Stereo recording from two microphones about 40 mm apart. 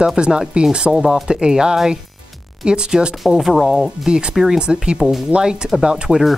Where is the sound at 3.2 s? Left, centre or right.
Centre.